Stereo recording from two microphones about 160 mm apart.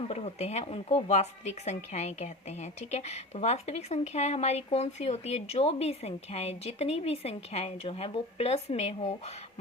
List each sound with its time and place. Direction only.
0.1 s speech: 40° left (ahead or behind)